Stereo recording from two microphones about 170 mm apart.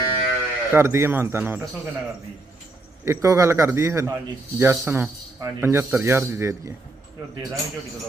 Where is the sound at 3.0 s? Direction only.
15° right (ahead or behind).